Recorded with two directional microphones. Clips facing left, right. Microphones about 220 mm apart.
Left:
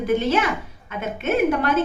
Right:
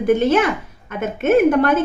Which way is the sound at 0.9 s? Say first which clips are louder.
Right 7 dB; 50° right (ahead or behind).